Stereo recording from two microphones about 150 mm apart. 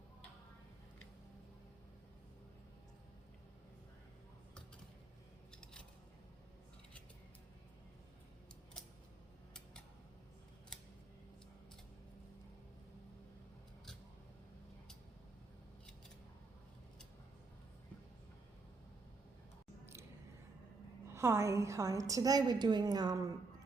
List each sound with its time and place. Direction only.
21.1 s a woman's voice: 15° right (ahead or behind)